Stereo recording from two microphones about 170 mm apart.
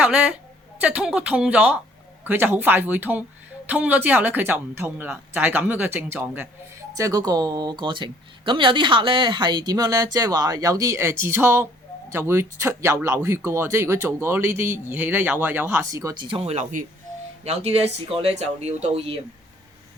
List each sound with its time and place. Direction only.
0.0 s speech: 5° right (ahead or behind); by 19.2 s 35° right (ahead or behind)